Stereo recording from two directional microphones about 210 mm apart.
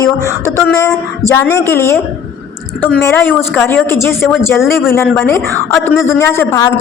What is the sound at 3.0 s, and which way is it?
A woman's voice, 10° left (ahead or behind).